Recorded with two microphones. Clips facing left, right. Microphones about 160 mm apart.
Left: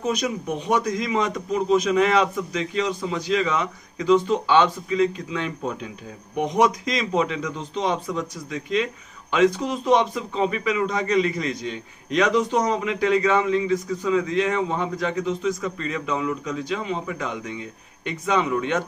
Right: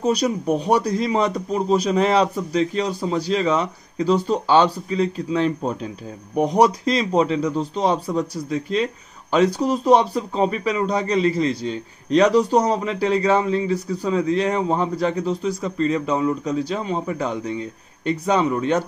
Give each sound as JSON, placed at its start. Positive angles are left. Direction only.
{"t": 0.0, "sound": "a man's voice", "side_deg": -35}